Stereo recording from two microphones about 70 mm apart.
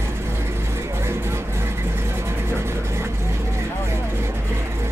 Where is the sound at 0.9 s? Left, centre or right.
Right.